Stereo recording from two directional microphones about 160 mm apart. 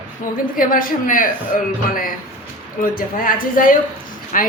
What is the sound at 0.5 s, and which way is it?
Speech, 60° left (ahead or behind).